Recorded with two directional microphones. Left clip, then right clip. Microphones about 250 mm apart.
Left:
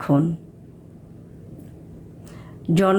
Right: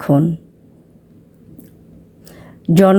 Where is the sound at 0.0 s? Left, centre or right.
Right.